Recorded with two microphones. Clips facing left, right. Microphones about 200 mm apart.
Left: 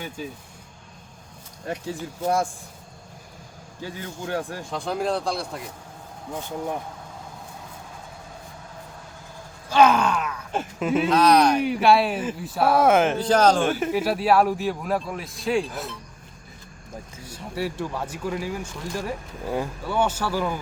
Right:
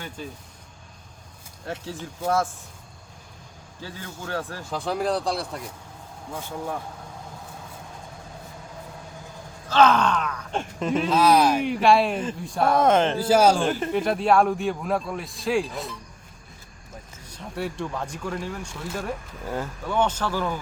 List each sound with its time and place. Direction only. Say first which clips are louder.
1.6 s speech: left 3 dB; 15° left (ahead or behind)
3.8 s speech: left 3 dB; 15° left (ahead or behind)
4.7 s a man's voice: right 1 dB; centre (ahead or behind)
9.6 s speech: left 1 dB; 10° left (ahead or behind)
13.1 s speech: even; 5° right (ahead or behind)
13.7 s a man's voice: left 1 dB; 10° left (ahead or behind)
17.2 s a man's voice: left 2 dB; 5° left (ahead or behind)
19.5 s speech: left 2 dB; 15° left (ahead or behind)